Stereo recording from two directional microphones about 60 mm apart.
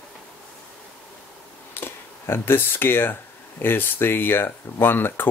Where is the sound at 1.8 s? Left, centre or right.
Left.